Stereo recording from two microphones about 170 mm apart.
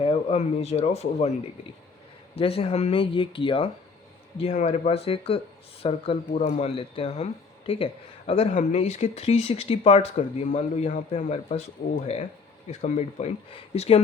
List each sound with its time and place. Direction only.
0.0 s speech: 35° left (ahead or behind)
2.3 s speech: 35° left (ahead or behind)
8.3 s speech: 35° left (ahead or behind)